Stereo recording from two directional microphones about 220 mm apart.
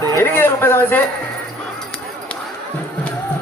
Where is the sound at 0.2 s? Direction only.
10° left (ahead or behind).